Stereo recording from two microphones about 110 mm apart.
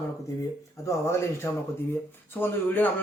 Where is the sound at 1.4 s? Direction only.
25° left (ahead or behind).